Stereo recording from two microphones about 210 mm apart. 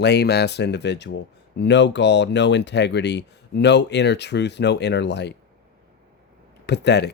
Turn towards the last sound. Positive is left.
turn(degrees=55)  # may be behind; listen again after turning